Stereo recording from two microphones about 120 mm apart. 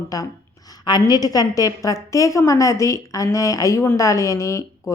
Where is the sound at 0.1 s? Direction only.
30° left (ahead or behind).